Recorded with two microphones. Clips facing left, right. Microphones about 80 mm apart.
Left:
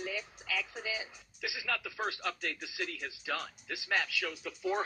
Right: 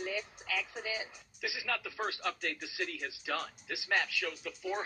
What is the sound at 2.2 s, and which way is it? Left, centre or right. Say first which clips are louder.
Speech: right 1 dB; right.